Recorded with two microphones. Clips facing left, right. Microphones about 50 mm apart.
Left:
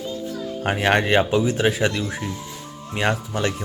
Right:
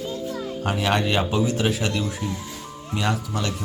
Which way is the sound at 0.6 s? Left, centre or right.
Left.